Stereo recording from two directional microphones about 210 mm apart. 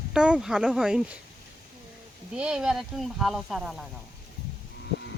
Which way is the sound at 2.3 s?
5° right (ahead or behind).